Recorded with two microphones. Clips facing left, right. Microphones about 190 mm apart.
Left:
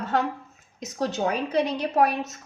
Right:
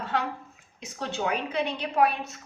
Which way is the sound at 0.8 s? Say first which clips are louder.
Left 5 dB; 40° left (ahead or behind).